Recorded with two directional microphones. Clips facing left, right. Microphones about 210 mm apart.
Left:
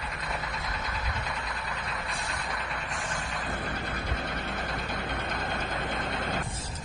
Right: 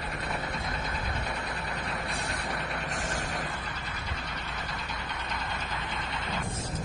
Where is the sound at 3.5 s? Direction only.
50° left (ahead or behind).